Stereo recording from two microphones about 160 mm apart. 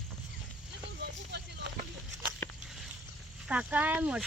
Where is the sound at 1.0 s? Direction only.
90° right.